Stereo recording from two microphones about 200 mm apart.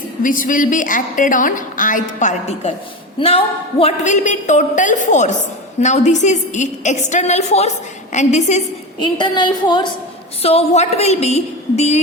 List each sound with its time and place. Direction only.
0.2 s a woman's voice: 40° left (ahead or behind)
9.1 s a woman's voice: 25° left (ahead or behind)